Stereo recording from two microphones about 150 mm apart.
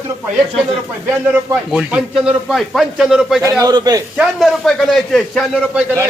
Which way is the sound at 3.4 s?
20° right (ahead or behind).